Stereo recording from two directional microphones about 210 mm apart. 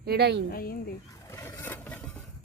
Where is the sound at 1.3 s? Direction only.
15° left (ahead or behind).